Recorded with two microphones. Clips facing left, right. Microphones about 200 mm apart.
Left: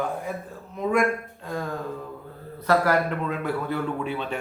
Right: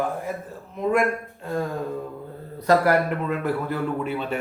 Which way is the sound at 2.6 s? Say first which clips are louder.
Right 2 dB; 5° right (ahead or behind).